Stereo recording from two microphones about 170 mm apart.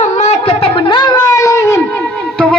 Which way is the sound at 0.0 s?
40° left (ahead or behind).